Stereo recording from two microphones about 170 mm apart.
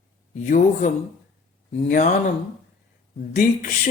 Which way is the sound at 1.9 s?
50° left (ahead or behind).